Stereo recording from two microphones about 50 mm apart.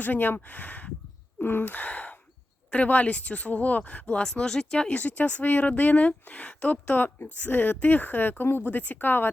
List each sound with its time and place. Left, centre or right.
0.0 s speech: left
1.4 s gasp: left
2.6 s speech: left
4.2 s speech: centre
4.9 s speech: left